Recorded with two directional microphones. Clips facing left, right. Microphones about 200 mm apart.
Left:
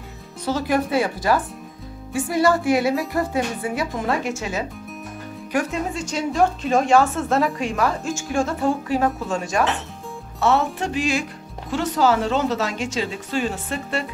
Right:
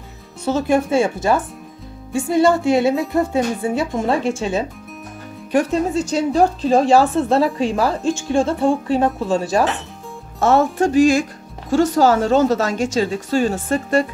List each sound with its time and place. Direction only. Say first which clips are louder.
0.5 s a woman's voice: right 4 dB; 25° right (ahead or behind)
10.4 s a woman's voice: right 5 dB; 45° right (ahead or behind)